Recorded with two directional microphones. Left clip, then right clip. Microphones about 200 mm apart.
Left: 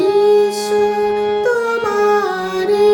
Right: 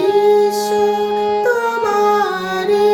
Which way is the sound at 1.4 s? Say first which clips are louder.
Even; 5° left (ahead or behind).